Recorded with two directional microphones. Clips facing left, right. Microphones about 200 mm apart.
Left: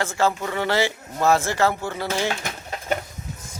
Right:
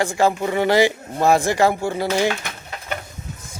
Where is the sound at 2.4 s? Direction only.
40° left (ahead or behind).